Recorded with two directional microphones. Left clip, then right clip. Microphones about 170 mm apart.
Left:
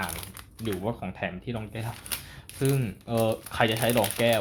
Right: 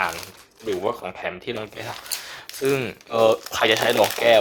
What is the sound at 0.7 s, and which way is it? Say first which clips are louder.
Speech: right 7 dB; 25° right (ahead or behind).